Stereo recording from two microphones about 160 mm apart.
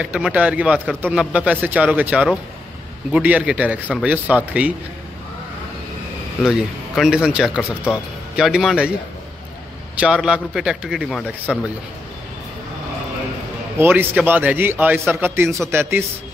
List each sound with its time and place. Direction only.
0.0 s a man's voice: 5° right (ahead or behind)
6.4 s a man's voice: 5° right (ahead or behind)
9.9 s a man's voice: 5° right (ahead or behind)
13.7 s a man's voice: 10° right (ahead or behind)